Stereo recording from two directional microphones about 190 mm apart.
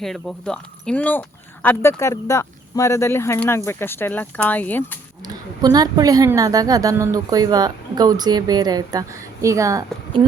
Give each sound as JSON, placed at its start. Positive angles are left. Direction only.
{"t": 0.0, "sound": "speech", "side_deg": 0}
{"t": 5.2, "sound": "a woman's voice", "side_deg": -20}